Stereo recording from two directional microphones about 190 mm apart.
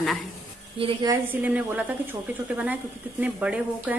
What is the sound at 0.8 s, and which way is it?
Speech, 30° right (ahead or behind).